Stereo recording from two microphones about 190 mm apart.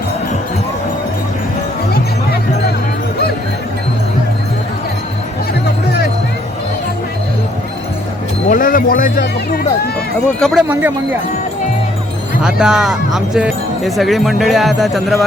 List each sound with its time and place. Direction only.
5.6 s music: 60° left (ahead or behind)
8.4 s speech: 45° left (ahead or behind)
10.2 s speech: centre (ahead or behind)
12.4 s speech: 5° right (ahead or behind)